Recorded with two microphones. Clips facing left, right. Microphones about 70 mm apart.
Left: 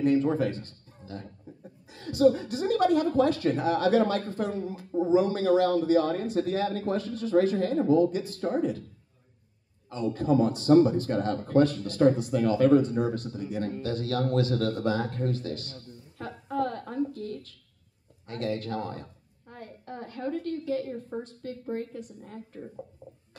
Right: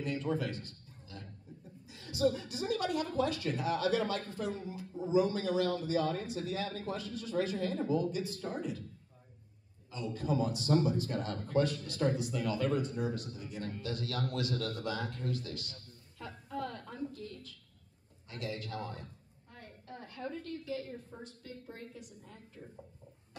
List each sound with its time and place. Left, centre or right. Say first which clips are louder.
0.0 s a man's voice: left 11 dB; left
9.8 s a man's voice: left 9 dB; left
16.2 s a sound: left 10 dB; left
18.3 s a man's voice: left 9 dB; left
19.5 s a sound: left 8 dB; left
21.2 s a man's voice: left 10 dB; left